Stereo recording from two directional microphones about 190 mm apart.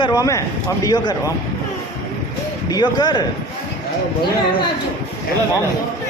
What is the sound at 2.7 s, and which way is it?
Speech, 20° left (ahead or behind).